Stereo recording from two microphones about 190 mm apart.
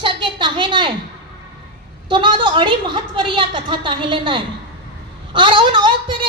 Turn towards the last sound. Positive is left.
turn(degrees=-25)  # may be behind; listen again after turning